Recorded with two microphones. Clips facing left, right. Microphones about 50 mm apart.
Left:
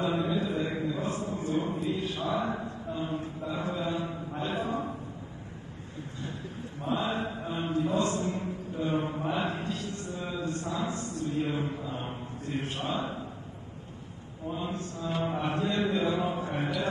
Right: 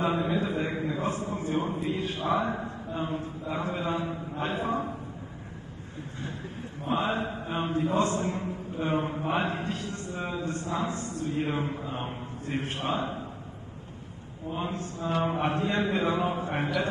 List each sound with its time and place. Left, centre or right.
0.0 s mantra: right
0.8 s a sound: right
3.4 s chant: right
4.4 s a sound: right
6.9 s mantra: right
7.5 s chant: right
9.3 s a sound: right
11.1 s mantra: right
14.6 s a man's voice: right